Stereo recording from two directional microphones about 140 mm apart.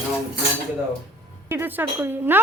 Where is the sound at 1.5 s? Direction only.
15° right (ahead or behind).